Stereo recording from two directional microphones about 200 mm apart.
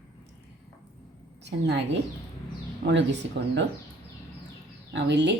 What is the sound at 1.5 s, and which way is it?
Speech, 60° right (ahead or behind).